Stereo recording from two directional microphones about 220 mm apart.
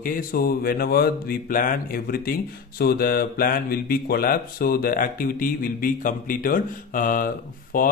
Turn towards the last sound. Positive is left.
turn(degrees=40)  # may be behind; listen again after turning